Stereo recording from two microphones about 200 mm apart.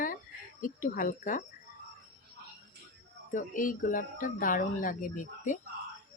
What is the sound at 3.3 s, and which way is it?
Speech, 40° left (ahead or behind).